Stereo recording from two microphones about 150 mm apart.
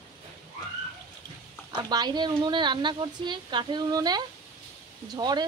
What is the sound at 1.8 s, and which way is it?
A woman's voice, 30° right (ahead or behind).